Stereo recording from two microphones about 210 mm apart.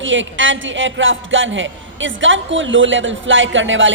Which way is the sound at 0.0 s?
65° right (ahead or behind).